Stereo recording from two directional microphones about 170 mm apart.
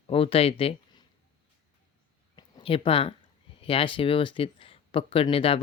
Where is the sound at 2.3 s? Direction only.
30° left (ahead or behind).